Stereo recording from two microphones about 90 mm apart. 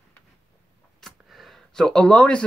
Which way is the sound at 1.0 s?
Centre (ahead or behind).